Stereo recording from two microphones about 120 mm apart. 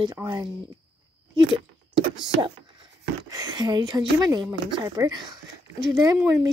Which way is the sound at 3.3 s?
35° right (ahead or behind).